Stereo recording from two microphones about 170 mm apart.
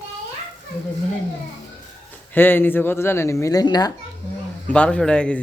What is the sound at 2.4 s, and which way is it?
Speech, 10° left (ahead or behind).